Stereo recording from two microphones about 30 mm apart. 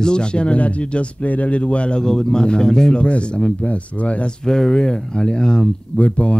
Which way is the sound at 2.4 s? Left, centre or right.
Left.